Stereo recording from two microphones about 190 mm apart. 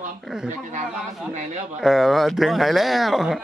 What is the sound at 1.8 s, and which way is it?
Speech, centre (ahead or behind).